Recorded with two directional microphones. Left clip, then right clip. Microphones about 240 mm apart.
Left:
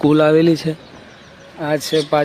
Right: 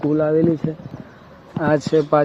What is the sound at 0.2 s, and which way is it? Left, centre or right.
Speech, left.